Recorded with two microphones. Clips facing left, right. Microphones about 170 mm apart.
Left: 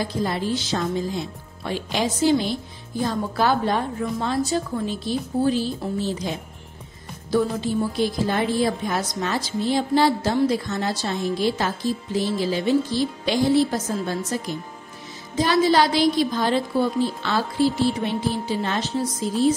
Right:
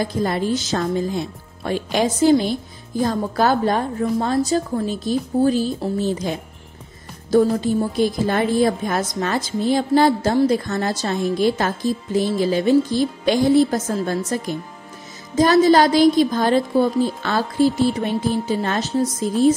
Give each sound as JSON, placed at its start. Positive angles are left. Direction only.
{"t": 0.0, "sound": "a woman's voice", "side_deg": -50}
{"t": 7.2, "sound": "a woman's voice", "side_deg": -45}
{"t": 15.3, "sound": "a woman's voice", "side_deg": -45}